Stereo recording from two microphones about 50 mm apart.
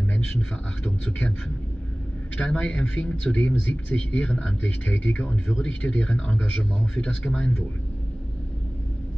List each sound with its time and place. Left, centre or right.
0.4 s a man's voice: left
2.3 s a man's voice: left
5.2 s speech: centre
5.7 s a man's voice: left